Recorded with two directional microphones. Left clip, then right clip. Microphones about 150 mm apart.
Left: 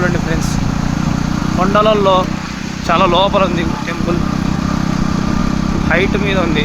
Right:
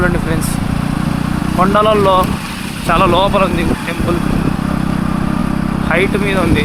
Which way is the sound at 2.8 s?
10° right (ahead or behind).